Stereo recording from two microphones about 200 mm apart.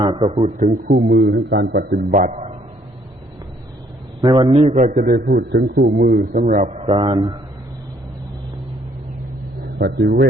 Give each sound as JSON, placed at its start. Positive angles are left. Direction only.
{"t": 0.0, "sound": "a man's voice", "side_deg": -25}
{"t": 0.5, "sound": "a man's voice", "side_deg": -40}
{"t": 0.9, "sound": "a man's voice", "side_deg": -60}
{"t": 4.2, "sound": "a man's voice", "side_deg": -20}
{"t": 4.9, "sound": "a man's voice", "side_deg": -50}
{"t": 6.5, "sound": "a man's voice", "side_deg": -35}
{"t": 9.7, "sound": "a man's voice", "side_deg": -50}